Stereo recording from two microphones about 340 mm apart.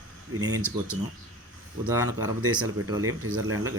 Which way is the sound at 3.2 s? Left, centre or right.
Right.